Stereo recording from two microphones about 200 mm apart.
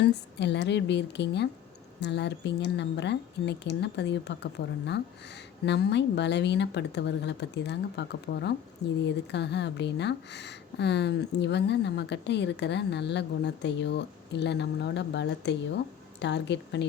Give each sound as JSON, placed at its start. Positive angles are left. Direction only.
{"t": 0.0, "sound": "speech", "side_deg": 60}